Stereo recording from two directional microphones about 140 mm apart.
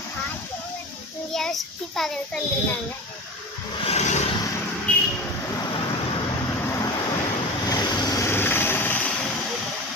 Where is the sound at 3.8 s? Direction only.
55° left (ahead or behind).